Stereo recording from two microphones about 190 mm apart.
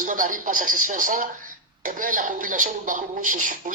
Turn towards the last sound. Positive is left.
turn(degrees=-45)  # may be behind; listen again after turning